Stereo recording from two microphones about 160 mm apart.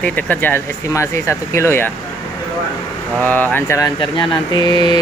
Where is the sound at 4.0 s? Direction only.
30° left (ahead or behind).